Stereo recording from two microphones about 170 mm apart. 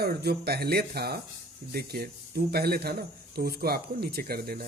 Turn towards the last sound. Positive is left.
turn(degrees=-65)  # may be behind; listen again after turning